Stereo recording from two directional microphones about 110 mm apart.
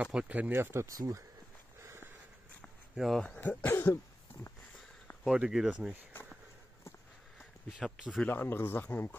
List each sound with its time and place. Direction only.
0.0 s speech: 10° right (ahead or behind); by 1.2 s 30° right (ahead or behind)
1.8 s a sound: 25° right (ahead or behind)
3.0 s speech: centre (ahead or behind)
3.3 s speech: 15° left (ahead or behind)
5.2 s speech: 5° right (ahead or behind)
7.8 s speech: centre (ahead or behind)
8.2 s speech: 15° left (ahead or behind)